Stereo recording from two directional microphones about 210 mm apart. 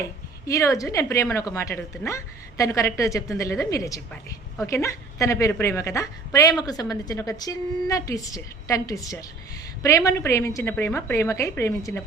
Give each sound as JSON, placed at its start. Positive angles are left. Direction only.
{"t": 0.4, "sound": "a woman's voice", "side_deg": 15}